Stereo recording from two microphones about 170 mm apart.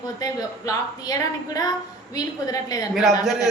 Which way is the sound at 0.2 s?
20° left (ahead or behind).